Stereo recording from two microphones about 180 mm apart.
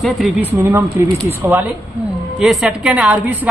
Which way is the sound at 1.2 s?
10° right (ahead or behind).